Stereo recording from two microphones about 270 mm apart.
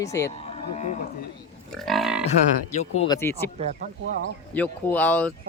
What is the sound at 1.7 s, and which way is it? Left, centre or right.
Grunt, centre.